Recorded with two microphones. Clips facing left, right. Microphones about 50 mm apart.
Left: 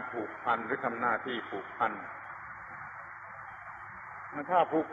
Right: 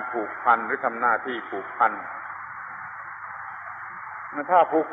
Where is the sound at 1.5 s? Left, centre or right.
Right.